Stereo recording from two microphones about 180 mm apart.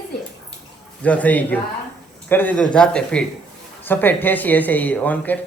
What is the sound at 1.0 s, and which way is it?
Speech, 10° left (ahead or behind).